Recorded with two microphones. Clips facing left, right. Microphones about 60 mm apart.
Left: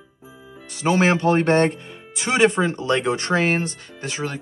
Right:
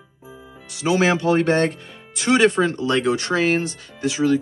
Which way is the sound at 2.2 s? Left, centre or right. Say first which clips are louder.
Right 2 dB; centre.